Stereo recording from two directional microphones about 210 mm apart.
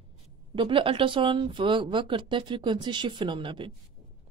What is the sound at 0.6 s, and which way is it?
Speech, 25° right (ahead or behind).